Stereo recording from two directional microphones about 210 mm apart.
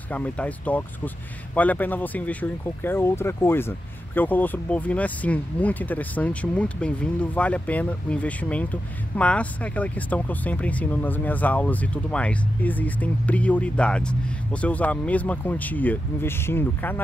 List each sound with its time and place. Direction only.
0.1 s speech: 5° left (ahead or behind)